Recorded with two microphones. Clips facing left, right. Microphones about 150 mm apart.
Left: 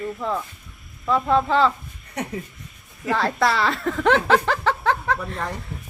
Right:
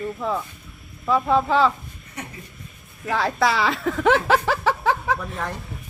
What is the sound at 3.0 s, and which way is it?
A woman's voice, centre (ahead or behind).